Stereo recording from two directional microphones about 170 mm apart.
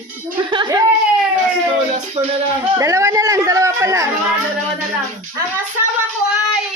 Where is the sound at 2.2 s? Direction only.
35° right (ahead or behind).